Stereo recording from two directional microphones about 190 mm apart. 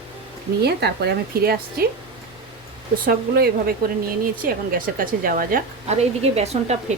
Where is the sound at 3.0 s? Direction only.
55° right (ahead or behind); by 6.8 s 35° right (ahead or behind).